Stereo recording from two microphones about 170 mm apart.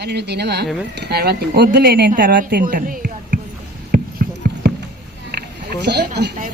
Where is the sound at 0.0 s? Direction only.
80° right.